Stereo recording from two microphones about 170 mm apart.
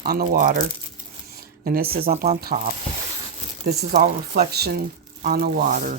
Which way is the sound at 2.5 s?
45° right (ahead or behind).